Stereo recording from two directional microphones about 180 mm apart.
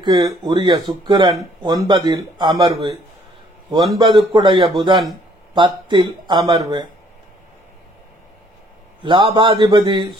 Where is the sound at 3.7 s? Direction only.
25° right (ahead or behind).